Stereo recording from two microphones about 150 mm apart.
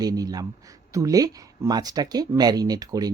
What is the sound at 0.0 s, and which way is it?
Speech, 25° right (ahead or behind).